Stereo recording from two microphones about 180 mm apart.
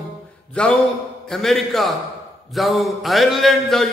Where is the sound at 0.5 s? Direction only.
5° left (ahead or behind).